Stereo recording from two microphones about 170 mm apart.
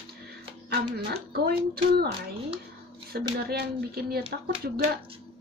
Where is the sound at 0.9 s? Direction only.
65° right (ahead or behind).